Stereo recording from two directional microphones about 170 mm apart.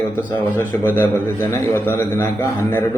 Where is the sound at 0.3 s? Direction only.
10° left (ahead or behind).